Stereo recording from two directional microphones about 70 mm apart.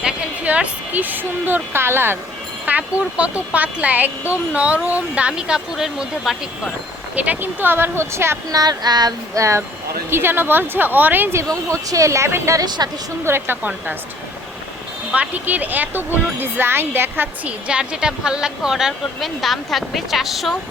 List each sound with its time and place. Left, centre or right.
0.4 s speech: centre
2.6 s speech: right; by 6.7 s centre
7.2 s speech: right
8.4 s child singing: right
9.3 s speech: right
10.1 s speech: right
11.7 s speech: right
12.6 s a woman's voice: right
13.2 s speech: right
15.1 s speech: right
17.7 s speech: centre